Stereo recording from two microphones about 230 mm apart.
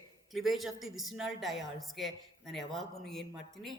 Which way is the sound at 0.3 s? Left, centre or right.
Centre.